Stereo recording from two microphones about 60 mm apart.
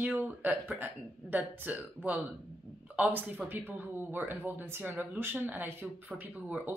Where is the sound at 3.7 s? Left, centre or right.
Right.